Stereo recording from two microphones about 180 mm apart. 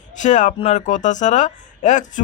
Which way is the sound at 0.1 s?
45° left (ahead or behind).